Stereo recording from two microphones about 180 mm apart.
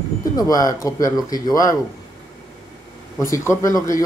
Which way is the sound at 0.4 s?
20° left (ahead or behind).